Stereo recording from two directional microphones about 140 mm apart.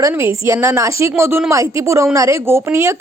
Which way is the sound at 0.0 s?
20° right (ahead or behind).